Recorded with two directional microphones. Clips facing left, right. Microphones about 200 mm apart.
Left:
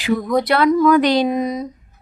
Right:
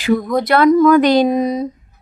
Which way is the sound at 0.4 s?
45° right (ahead or behind).